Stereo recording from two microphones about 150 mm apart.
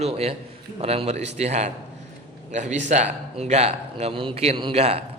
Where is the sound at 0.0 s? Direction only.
45° right (ahead or behind).